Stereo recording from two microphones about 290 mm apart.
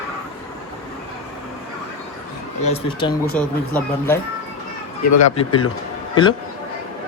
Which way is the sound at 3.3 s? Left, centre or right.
Centre.